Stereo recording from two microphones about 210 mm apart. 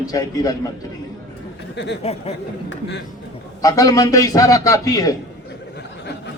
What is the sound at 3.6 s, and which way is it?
A man's voice, 15° left (ahead or behind).